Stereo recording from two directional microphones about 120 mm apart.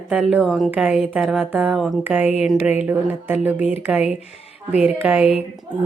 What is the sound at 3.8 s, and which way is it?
A woman's voice, 5° right (ahead or behind).